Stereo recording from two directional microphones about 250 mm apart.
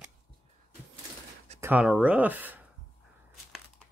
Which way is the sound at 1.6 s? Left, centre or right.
Centre.